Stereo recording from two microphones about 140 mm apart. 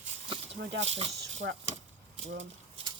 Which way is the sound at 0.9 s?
45° right (ahead or behind).